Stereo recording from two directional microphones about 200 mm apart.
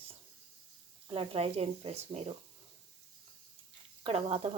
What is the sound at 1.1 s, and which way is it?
Speech, 30° right (ahead or behind).